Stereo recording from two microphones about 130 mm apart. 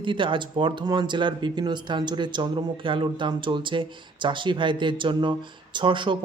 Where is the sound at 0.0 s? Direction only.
40° right (ahead or behind).